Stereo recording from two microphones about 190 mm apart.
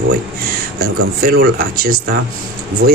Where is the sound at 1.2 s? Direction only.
50° right (ahead or behind).